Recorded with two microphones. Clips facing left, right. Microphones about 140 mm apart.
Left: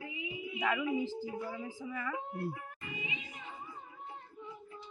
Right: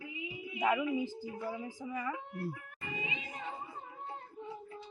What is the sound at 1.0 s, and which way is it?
A woman's voice, 15° right (ahead or behind).